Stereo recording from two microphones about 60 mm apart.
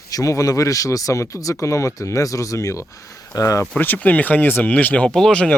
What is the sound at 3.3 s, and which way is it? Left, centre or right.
Speech, left.